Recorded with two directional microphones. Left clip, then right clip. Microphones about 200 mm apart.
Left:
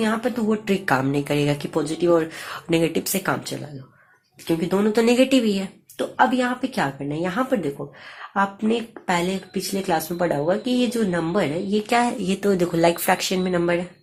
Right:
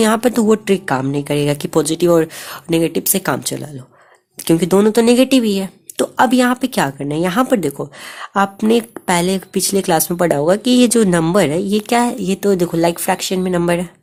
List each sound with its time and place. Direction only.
0.0 s speech: 35° right (ahead or behind)
0.7 s a woman's voice: 20° right (ahead or behind)